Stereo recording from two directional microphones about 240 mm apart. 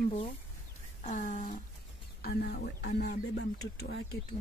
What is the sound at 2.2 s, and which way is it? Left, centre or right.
Speech, left.